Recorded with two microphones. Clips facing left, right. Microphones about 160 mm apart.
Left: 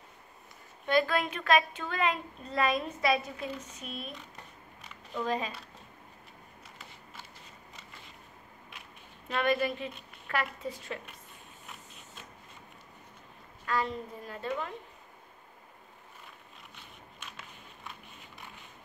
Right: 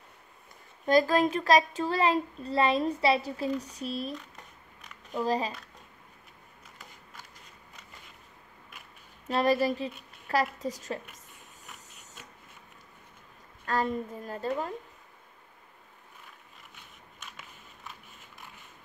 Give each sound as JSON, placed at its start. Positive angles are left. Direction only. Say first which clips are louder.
{"t": 0.8, "sound": "a child's voice", "louder": "right 5 dB", "side_deg": -40}
{"t": 5.2, "sound": "a child's voice", "louder": "right 4 dB", "side_deg": -35}
{"t": 9.3, "sound": "a child's voice", "louder": "right 4 dB", "side_deg": -35}
{"t": 13.7, "sound": "a woman's voice", "louder": "right 3 dB", "side_deg": -45}